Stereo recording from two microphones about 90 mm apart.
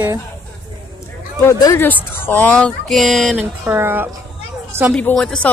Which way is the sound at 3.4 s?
25° right (ahead or behind).